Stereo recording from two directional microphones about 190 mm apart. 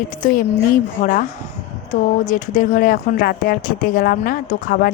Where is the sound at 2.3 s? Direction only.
40° left (ahead or behind).